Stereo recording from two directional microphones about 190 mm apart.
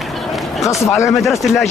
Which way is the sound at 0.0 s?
Centre (ahead or behind).